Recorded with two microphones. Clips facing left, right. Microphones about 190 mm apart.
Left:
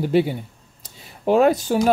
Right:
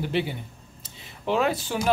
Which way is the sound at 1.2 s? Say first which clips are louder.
Left 8 dB; 45° left (ahead or behind).